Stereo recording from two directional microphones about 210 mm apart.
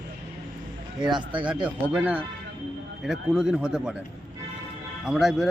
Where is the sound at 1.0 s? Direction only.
20° right (ahead or behind).